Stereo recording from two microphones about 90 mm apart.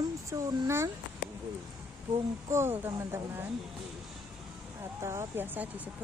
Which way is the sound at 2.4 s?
30° right (ahead or behind).